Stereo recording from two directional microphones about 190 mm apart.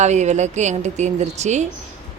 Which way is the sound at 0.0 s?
35° right (ahead or behind).